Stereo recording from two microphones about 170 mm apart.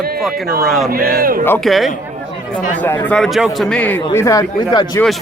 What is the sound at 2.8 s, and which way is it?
Speech, 10° left (ahead or behind).